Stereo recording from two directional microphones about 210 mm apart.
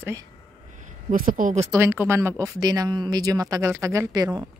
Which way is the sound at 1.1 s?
40° right (ahead or behind).